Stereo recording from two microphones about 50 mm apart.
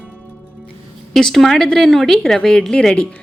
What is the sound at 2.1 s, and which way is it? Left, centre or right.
Speech, centre.